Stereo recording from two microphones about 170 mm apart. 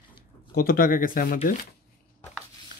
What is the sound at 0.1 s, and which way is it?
Speech, 60° left (ahead or behind).